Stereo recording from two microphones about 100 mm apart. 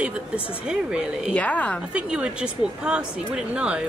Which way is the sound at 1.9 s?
10° right (ahead or behind).